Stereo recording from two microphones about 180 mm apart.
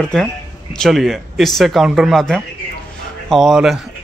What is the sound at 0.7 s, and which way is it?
A man's voice, centre (ahead or behind).